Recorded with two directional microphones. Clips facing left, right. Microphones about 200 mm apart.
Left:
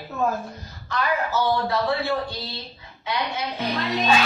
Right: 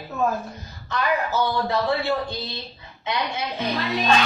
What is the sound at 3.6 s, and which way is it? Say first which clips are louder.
Snicker: even; centre (ahead or behind).